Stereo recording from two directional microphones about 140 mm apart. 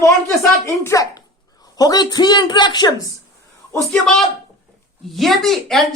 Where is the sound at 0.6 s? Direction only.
20° left (ahead or behind).